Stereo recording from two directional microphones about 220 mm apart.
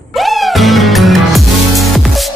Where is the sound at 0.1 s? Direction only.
Centre (ahead or behind).